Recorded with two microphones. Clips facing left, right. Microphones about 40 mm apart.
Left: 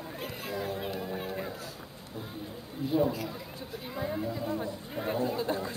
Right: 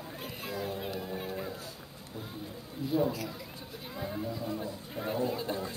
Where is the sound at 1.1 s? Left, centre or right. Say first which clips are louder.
Left 1 dB; centre.